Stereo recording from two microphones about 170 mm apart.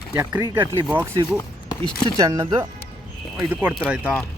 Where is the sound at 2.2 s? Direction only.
20° right (ahead or behind).